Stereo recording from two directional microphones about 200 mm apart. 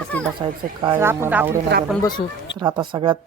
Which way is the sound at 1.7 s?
60° right (ahead or behind).